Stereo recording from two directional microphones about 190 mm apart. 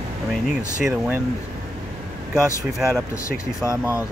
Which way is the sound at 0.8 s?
5° right (ahead or behind).